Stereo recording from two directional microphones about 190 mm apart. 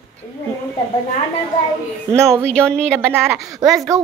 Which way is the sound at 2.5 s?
5° left (ahead or behind).